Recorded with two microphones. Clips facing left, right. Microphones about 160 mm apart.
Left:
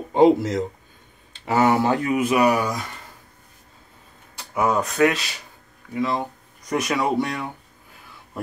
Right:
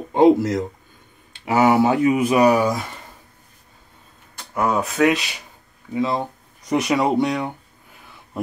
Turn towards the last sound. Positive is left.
turn(degrees=-15)  # may be behind; listen again after turning